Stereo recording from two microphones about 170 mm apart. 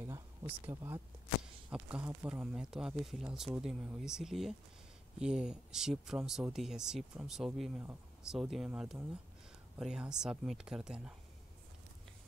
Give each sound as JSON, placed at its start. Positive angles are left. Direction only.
{"t": 0.0, "sound": "speech", "side_deg": -15}